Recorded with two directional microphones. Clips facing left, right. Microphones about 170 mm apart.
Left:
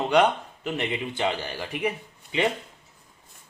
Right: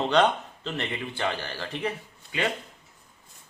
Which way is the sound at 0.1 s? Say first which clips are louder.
Left 3 dB; 10° left (ahead or behind).